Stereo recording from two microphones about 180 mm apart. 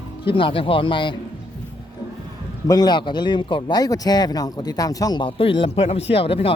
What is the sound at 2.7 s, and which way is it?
Speech, 20° left (ahead or behind).